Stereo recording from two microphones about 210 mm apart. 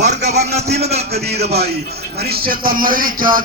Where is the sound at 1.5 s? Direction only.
50° right (ahead or behind).